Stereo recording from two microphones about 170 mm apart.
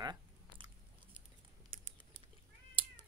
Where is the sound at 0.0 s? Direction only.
25° right (ahead or behind).